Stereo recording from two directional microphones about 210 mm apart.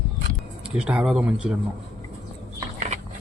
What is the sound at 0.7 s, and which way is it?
Speech, 5° right (ahead or behind).